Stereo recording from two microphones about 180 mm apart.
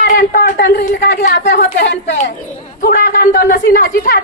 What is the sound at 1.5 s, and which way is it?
Speech, 75° left (ahead or behind).